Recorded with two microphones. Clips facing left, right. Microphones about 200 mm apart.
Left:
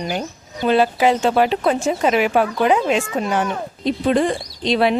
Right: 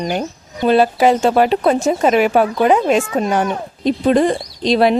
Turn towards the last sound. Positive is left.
turn(degrees=-40)  # may be behind; listen again after turning